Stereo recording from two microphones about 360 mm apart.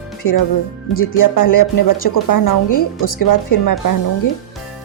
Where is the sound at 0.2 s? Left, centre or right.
Left.